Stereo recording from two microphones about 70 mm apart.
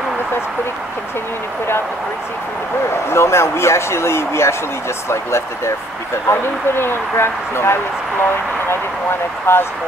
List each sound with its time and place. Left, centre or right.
2.9 s speech: left
6.2 s speech: left
9.5 s speech: left